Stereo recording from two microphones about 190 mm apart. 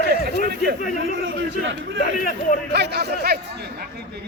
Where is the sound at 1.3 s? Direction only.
80° right.